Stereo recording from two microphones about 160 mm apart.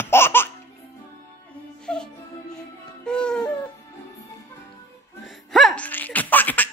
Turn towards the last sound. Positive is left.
turn(degrees=10)  # may be behind; listen again after turning